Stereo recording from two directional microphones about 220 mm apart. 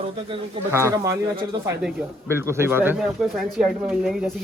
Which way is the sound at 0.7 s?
10° right (ahead or behind).